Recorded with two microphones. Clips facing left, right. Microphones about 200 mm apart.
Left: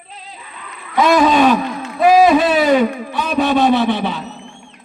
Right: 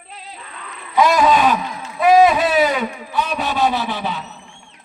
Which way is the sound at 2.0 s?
30° left (ahead or behind).